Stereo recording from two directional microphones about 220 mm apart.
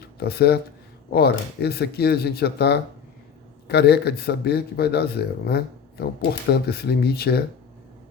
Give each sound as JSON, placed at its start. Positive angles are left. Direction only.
{"t": 0.2, "sound": "a man's voice", "side_deg": 45}